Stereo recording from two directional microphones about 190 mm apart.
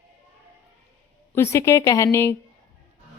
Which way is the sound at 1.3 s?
15° left (ahead or behind).